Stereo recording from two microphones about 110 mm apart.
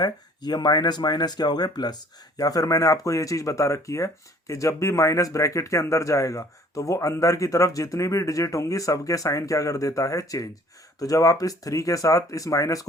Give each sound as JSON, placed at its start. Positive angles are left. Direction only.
{"t": 0.0, "sound": "speech", "side_deg": 40}